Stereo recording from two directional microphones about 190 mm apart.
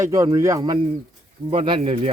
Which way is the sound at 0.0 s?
15° right (ahead or behind).